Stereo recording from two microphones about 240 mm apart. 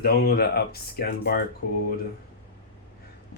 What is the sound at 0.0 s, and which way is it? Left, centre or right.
Speech, left.